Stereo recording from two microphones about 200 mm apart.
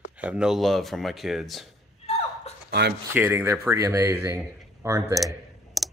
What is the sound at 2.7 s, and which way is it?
Speech, 55° right (ahead or behind).